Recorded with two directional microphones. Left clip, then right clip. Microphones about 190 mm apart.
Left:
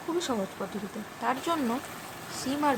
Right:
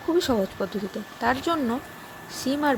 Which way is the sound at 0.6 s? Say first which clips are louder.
Right 6 dB; 25° right (ahead or behind).